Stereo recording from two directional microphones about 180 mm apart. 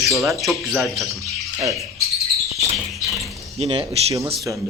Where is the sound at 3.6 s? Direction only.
35° right (ahead or behind).